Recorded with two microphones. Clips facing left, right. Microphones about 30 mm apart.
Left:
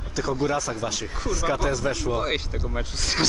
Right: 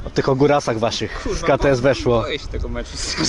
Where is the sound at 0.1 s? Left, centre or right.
Right.